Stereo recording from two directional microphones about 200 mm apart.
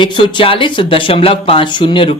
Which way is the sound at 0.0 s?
25° left (ahead or behind).